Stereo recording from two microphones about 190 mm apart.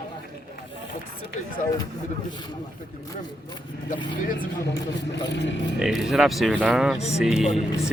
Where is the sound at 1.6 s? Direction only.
40° left (ahead or behind).